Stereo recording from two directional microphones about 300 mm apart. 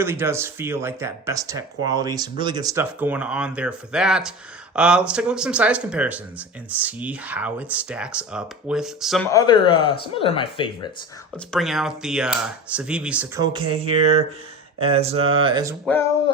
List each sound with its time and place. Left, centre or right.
0.0 s speech: centre
9.3 s speech: centre
11.5 s speech: centre
14.8 s mantra: centre
15.3 s speech: centre